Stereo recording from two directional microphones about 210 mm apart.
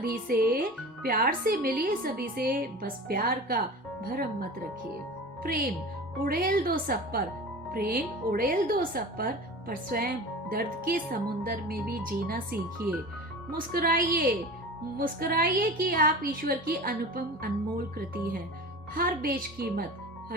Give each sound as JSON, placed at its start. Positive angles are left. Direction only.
{"t": 0.0, "sound": "speech", "side_deg": -45}
{"t": 18.9, "sound": "speech", "side_deg": -45}